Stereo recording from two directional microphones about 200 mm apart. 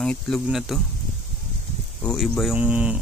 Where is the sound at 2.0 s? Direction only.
Centre (ahead or behind).